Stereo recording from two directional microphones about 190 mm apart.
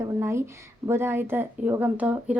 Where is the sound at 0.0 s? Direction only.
15° right (ahead or behind).